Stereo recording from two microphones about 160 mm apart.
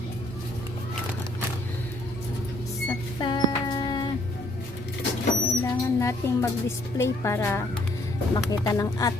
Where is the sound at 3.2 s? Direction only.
30° left (ahead or behind).